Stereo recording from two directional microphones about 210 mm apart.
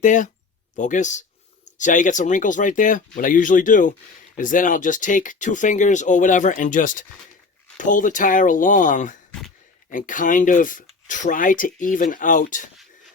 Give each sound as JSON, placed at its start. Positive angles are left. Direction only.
{"t": 0.0, "sound": "speech", "side_deg": 35}